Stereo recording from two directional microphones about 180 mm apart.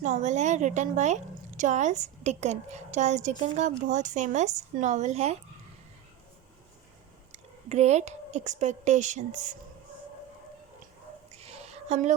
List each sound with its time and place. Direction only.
0.0 s a woman's voice: 40° right (ahead or behind)
7.7 s a woman's voice: 40° right (ahead or behind)
11.3 s a sound: 35° right (ahead or behind)